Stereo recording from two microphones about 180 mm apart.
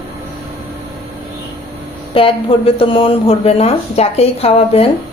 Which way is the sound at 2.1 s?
30° left (ahead or behind).